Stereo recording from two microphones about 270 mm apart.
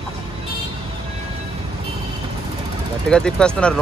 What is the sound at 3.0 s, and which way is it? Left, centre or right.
Speech, centre.